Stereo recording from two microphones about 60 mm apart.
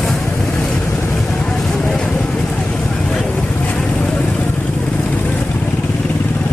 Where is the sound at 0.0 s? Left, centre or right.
Centre.